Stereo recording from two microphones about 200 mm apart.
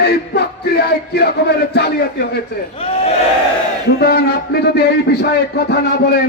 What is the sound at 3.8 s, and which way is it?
Music, 55° left (ahead or behind).